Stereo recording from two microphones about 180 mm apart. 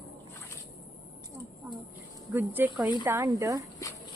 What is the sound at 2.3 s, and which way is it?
Speech, 10° right (ahead or behind).